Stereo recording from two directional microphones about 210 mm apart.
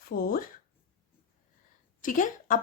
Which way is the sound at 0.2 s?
45° left (ahead or behind).